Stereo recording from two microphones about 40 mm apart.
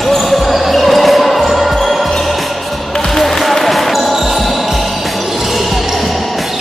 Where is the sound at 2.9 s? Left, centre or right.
Centre.